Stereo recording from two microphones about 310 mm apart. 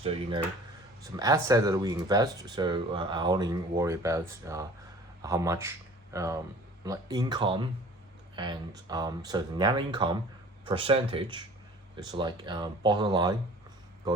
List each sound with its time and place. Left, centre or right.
0.0 s speech: centre